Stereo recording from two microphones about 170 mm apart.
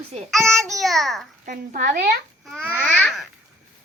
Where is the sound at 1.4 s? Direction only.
50° right (ahead or behind).